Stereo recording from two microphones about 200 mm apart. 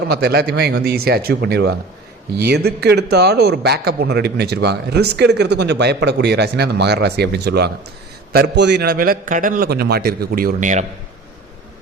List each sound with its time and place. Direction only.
0.1 s a man's voice: 50° right (ahead or behind)